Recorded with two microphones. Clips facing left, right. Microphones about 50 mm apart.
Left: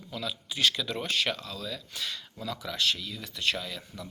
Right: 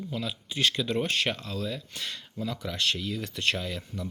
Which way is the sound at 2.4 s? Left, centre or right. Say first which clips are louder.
Right 3 dB; right.